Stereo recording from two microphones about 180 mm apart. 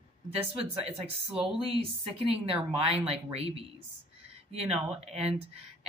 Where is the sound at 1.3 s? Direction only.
5° right (ahead or behind).